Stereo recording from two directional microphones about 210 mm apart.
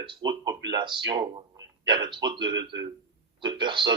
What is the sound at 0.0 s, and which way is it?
Speech, 20° right (ahead or behind).